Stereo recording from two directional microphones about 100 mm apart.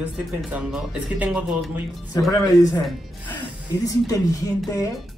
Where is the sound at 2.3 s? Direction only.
35° left (ahead or behind).